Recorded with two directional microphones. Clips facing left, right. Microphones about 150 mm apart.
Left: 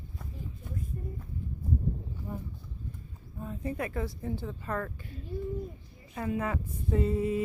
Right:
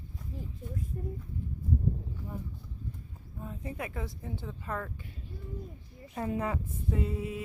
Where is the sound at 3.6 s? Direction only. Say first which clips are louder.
Left 5 dB; 15° right (ahead or behind).